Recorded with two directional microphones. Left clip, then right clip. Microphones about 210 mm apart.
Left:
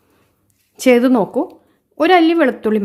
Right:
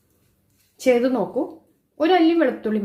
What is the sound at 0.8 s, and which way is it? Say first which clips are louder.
A woman's voice: left 6 dB; 30° left (ahead or behind).